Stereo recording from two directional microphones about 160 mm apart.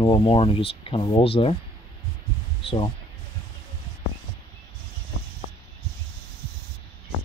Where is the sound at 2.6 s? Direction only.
35° left (ahead or behind).